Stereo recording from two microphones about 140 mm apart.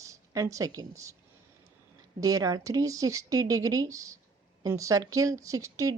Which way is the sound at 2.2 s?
25° right (ahead or behind).